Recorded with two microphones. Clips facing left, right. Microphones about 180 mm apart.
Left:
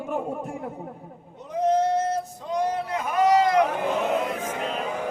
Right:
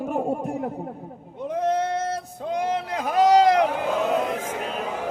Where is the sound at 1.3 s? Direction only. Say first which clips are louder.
Left 1 dB; 55° right (ahead or behind); by 3.5 s 90° right.